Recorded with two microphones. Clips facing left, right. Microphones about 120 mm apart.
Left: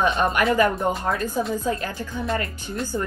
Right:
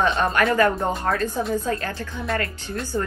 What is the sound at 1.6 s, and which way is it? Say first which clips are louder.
A woman's voice: even; 20° left (ahead or behind).